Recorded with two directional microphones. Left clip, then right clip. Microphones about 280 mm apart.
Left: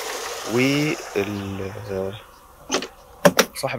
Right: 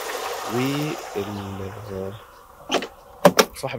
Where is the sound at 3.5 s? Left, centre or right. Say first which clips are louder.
Left 3 dB; centre.